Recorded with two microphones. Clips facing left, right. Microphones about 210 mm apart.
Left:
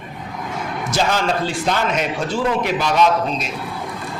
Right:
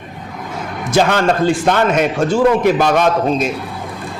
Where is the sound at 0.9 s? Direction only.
55° right (ahead or behind).